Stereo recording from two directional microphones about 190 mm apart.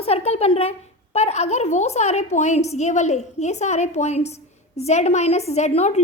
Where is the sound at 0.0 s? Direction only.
30° left (ahead or behind).